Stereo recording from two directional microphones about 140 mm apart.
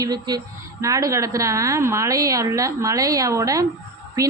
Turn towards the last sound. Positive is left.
turn(degrees=-25)  # may be behind; listen again after turning